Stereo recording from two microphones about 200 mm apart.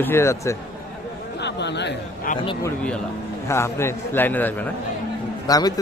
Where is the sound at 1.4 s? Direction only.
60° left (ahead or behind).